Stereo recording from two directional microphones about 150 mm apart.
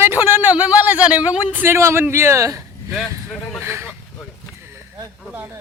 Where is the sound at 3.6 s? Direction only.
15° right (ahead or behind).